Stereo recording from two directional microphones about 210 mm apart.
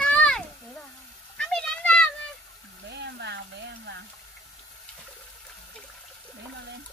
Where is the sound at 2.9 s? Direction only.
55° right (ahead or behind).